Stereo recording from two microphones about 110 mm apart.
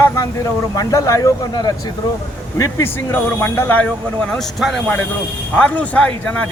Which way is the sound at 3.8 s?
5° left (ahead or behind).